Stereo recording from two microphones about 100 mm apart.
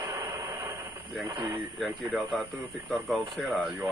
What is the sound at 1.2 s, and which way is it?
Speech, 40° right (ahead or behind).